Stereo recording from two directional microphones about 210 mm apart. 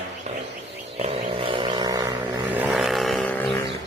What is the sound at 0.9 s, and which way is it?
Vehicle, 30° right (ahead or behind).